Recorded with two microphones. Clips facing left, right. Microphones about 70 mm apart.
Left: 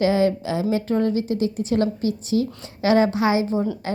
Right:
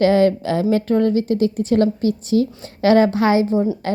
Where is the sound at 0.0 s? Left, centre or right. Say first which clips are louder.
Right 5 dB; right.